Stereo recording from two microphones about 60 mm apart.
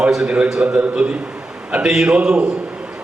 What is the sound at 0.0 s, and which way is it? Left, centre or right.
A man's voice, centre.